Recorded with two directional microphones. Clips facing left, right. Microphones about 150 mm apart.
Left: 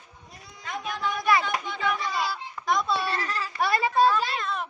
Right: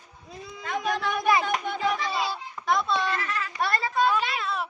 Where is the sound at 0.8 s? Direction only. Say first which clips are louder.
Right 3 dB; 90° right.